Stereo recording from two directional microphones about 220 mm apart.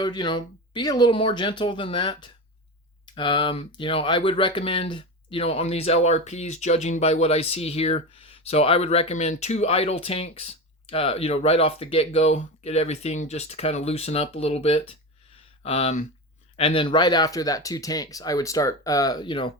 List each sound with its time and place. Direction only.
0.0 s speech: 20° left (ahead or behind)